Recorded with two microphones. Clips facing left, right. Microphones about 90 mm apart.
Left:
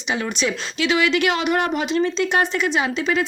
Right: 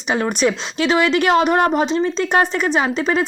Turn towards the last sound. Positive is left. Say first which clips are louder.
# right 3 dB
turn(degrees=-40)  # may be behind; listen again after turning